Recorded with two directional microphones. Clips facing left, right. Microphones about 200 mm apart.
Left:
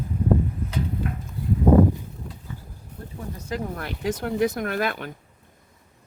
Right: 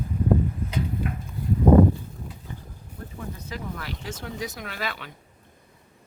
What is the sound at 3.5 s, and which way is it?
Speech, 50° left (ahead or behind).